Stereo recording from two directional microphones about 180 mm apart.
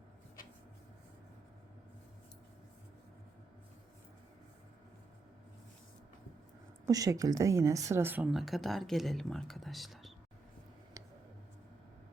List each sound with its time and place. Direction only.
6.8 s speech: 20° right (ahead or behind); by 10.1 s centre (ahead or behind)